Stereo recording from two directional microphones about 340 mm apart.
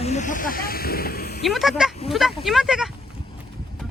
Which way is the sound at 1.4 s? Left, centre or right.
Centre.